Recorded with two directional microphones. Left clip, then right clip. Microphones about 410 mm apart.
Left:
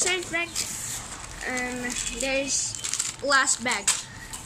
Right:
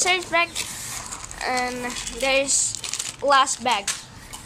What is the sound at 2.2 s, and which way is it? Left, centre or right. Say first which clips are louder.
Speech: right 7 dB; centre.